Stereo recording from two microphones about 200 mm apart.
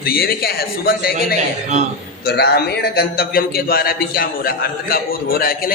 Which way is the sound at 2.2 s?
55° left (ahead or behind).